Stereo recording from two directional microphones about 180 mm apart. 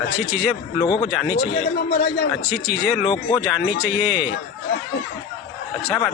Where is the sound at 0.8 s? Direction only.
30° left (ahead or behind).